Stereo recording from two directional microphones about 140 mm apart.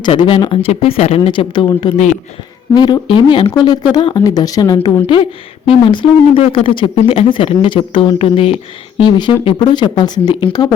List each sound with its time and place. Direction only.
0.0 s speech: 35° left (ahead or behind)
5.0 s speech: 40° left (ahead or behind)